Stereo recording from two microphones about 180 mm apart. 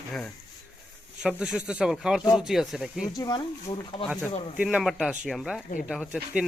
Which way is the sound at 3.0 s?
20° left (ahead or behind).